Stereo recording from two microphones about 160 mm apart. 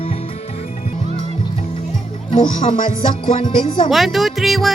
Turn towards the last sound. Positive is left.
turn(degrees=0)  # may be behind; listen again after turning